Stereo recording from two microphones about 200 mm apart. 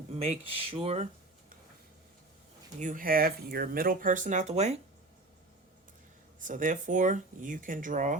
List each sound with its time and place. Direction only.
0.2 s speech: 30° right (ahead or behind)
2.8 s speech: 45° right (ahead or behind)
6.4 s speech: 40° right (ahead or behind)